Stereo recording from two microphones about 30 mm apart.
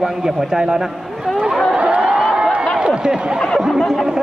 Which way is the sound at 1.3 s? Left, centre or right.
Centre.